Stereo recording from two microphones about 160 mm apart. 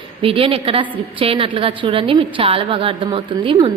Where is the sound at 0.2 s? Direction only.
35° right (ahead or behind).